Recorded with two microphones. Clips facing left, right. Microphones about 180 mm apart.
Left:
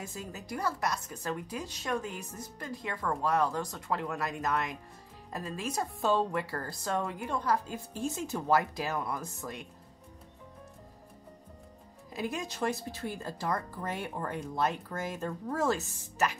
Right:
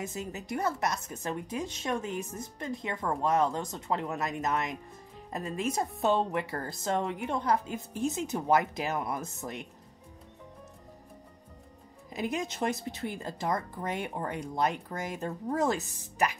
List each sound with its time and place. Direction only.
0.0 s speech: 20° right (ahead or behind)
12.1 s speech: 20° right (ahead or behind)